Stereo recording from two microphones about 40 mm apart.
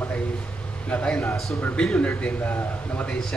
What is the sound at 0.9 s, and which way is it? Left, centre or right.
Speech, left.